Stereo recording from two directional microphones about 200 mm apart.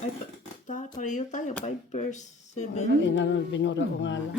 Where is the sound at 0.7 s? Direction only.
40° left (ahead or behind).